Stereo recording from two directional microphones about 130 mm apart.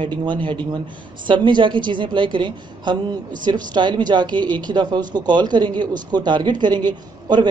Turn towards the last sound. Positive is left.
turn(degrees=-35)  # may be behind; listen again after turning